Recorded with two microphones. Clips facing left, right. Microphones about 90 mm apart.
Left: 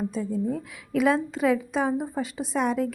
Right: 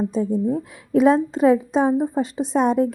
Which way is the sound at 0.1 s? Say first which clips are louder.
Right 6 dB; 30° right (ahead or behind).